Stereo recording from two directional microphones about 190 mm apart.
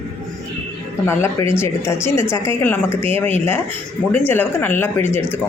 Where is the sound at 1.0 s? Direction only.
15° left (ahead or behind).